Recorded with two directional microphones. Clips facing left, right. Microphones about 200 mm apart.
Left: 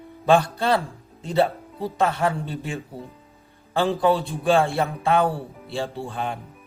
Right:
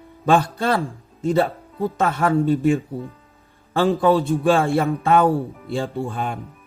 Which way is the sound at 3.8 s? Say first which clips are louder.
Right 3 dB; 50° right (ahead or behind).